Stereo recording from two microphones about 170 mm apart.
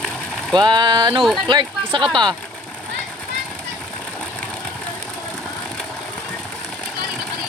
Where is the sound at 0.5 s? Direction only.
25° right (ahead or behind).